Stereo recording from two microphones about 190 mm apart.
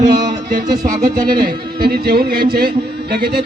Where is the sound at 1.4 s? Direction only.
55° right (ahead or behind).